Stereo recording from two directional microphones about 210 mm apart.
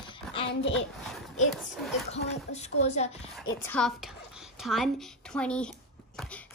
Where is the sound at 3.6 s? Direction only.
5° left (ahead or behind).